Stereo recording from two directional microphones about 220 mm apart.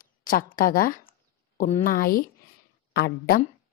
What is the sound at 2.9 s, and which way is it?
Speech, 45° left (ahead or behind).